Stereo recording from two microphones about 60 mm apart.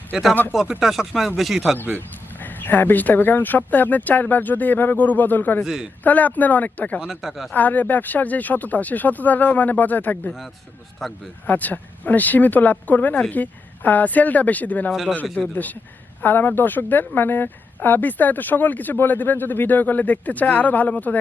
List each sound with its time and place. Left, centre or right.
0.8 s speech: centre
2.0 s speech: left
5.6 s speech: centre
6.0 s speech: left
7.1 s speech: centre
7.5 s speech: left
11.0 s speech: centre
11.4 s speech: left
16.2 s speech: left